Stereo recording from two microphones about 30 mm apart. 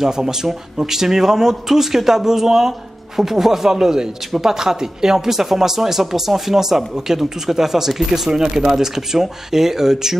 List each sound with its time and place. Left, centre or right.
0.0 s a man's voice: centre
8.3 s a man's voice: right